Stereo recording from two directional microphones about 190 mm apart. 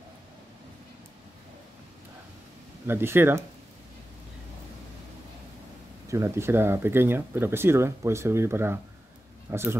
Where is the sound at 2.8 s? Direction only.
10° right (ahead or behind).